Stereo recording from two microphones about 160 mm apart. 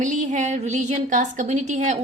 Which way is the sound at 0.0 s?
50° right (ahead or behind).